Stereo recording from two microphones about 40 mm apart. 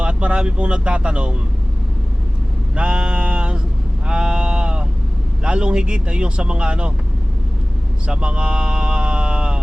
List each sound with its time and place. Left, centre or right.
0.0 s speech: right
2.7 s a sound: right
4.0 s sheep: right
5.4 s speech: right
8.0 s speech: right